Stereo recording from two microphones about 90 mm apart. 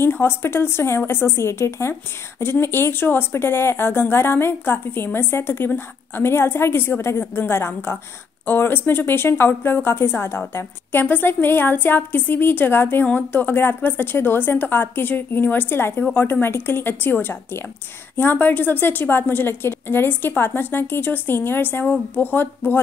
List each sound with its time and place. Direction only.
0.0 s a woman's voice: 25° left (ahead or behind)